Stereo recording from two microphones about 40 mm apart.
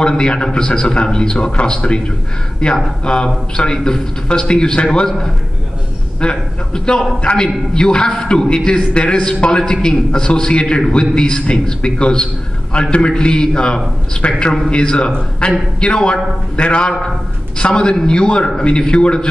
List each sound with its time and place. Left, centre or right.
0.2 s a man's voice: left
6.2 s a man's voice: centre
16.8 s a man's voice: centre